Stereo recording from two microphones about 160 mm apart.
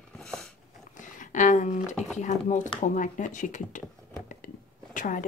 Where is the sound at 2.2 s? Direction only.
50° left (ahead or behind).